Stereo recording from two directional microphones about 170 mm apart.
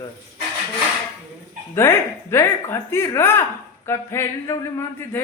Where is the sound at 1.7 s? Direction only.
15° left (ahead or behind).